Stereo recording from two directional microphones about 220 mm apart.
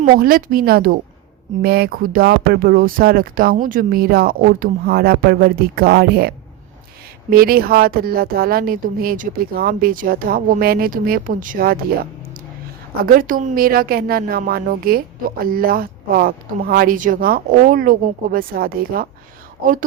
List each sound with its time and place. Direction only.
0.0 s speech: 40° right (ahead or behind)
13.0 s speech: 40° right (ahead or behind)